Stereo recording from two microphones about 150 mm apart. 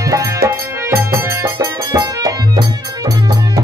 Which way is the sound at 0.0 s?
20° right (ahead or behind).